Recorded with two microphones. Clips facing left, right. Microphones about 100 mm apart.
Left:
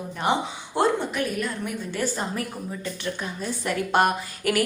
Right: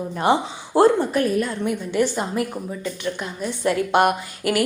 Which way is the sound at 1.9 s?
15° right (ahead or behind).